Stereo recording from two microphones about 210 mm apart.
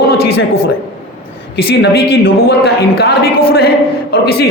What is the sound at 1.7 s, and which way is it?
Speech, 50° left (ahead or behind).